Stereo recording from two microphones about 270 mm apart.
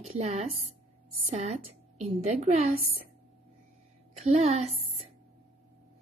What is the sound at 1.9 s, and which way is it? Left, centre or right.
Speech, right.